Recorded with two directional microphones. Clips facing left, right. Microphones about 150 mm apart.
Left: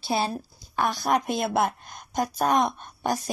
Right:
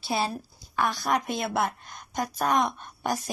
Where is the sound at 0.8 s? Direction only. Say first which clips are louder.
Left 2 dB; 5° left (ahead or behind).